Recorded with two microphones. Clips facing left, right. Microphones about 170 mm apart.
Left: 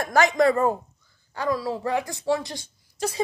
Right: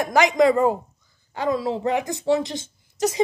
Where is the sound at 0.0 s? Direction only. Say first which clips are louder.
Right 2 dB; 15° right (ahead or behind).